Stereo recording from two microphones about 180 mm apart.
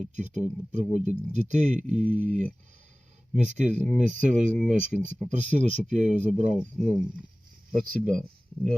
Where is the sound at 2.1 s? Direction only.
10° left (ahead or behind).